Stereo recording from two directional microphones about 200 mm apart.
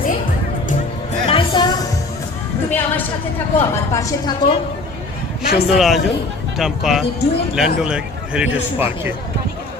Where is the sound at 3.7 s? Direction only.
15° left (ahead or behind).